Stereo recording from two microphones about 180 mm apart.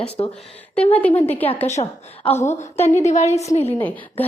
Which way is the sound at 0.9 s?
10° left (ahead or behind).